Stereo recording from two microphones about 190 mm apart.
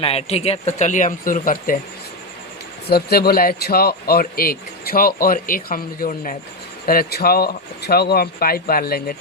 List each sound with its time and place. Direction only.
0.0 s speech: 30° left (ahead or behind)
2.9 s a man's voice: 55° left (ahead or behind)